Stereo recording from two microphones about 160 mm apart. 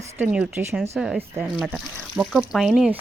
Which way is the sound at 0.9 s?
Centre (ahead or behind).